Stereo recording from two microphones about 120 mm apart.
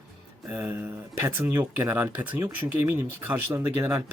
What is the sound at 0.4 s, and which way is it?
Speech, 15° right (ahead or behind).